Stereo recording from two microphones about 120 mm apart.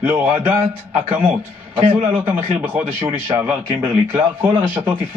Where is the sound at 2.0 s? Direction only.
15° right (ahead or behind).